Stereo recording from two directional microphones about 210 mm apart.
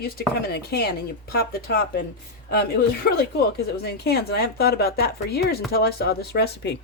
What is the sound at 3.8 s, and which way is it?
Speech, 50° left (ahead or behind).